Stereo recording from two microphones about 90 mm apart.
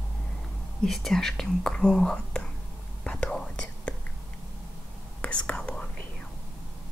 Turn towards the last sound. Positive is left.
turn(degrees=10)  # may be behind; listen again after turning